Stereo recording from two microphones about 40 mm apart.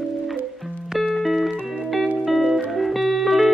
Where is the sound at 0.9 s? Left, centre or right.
Centre.